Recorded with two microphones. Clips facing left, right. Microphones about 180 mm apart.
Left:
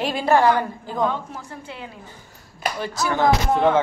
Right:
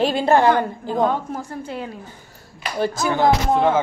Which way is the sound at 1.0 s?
45° right (ahead or behind).